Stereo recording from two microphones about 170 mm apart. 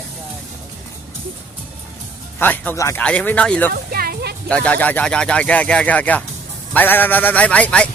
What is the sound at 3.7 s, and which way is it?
Music, 60° right (ahead or behind).